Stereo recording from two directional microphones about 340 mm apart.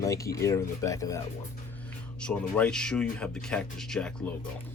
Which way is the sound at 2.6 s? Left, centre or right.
Centre.